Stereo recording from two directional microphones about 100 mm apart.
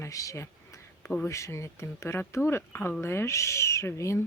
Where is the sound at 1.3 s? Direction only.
30° left (ahead or behind).